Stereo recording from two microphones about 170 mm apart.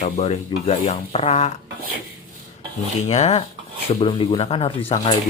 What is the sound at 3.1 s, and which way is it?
Rub, 40° left (ahead or behind).